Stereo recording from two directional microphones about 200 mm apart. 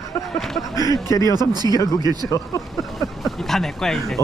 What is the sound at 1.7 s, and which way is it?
Speech, 15° left (ahead or behind).